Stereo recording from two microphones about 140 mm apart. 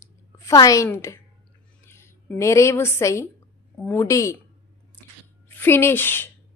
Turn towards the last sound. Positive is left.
turn(degrees=15)  # may be behind; listen again after turning